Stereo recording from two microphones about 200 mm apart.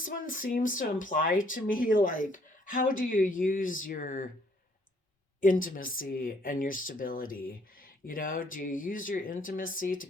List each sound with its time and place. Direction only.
0.0 s speech: 40° left (ahead or behind)
5.4 s speech: 40° left (ahead or behind)